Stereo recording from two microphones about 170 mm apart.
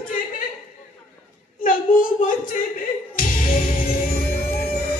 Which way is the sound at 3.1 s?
55° left (ahead or behind).